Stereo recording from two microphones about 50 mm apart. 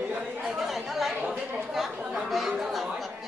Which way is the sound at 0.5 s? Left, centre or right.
Centre.